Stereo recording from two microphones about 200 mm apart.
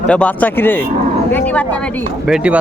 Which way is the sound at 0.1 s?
5° left (ahead or behind).